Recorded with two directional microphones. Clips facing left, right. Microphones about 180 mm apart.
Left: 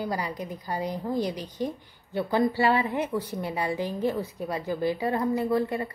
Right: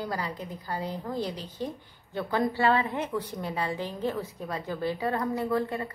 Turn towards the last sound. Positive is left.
turn(degrees=10)  # may be behind; listen again after turning